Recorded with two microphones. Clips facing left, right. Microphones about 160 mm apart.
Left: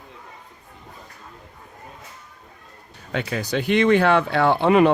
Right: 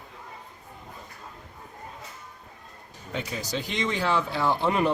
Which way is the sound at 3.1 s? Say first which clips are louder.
Left 7 dB; 65° left (ahead or behind).